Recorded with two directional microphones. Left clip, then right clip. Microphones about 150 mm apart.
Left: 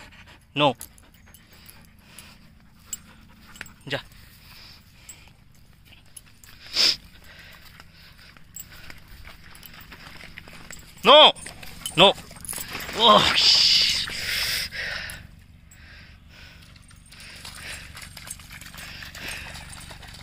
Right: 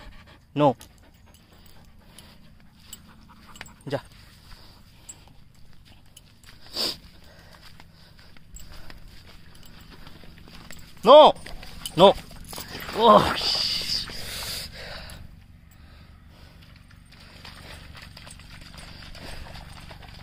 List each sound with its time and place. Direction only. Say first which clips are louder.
0.5 s speech: even; 45° right (ahead or behind)
3.9 s speech: even; 55° right (ahead or behind)
6.6 s a sound: left 8 dB; 50° right (ahead or behind)
9.8 s clip-clop: left 7 dB; 15° left (ahead or behind)
11.0 s speech: right 1 dB; 30° right (ahead or behind)
12.7 s a sound: even; 60° right (ahead or behind)
14.1 s snort: left 8 dB; 15° right (ahead or behind)
17.4 s clip-clop: left 3 dB; 5° right (ahead or behind)
17.6 s clip-clop: left 6 dB; 20° right (ahead or behind)
19.5 s clip-clop: left 3 dB; 5° right (ahead or behind)